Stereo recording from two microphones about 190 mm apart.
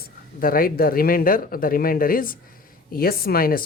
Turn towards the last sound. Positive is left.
turn(degrees=50)  # may be behind; listen again after turning